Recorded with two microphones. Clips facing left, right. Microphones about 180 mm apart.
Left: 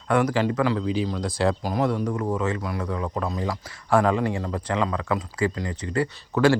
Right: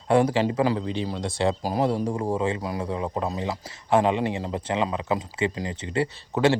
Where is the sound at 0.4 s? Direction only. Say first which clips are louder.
Even; 20° right (ahead or behind).